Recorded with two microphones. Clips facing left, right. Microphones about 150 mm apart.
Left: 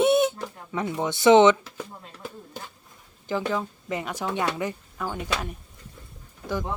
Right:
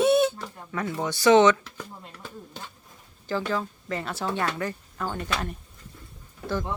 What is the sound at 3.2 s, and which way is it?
Speech, 15° left (ahead or behind).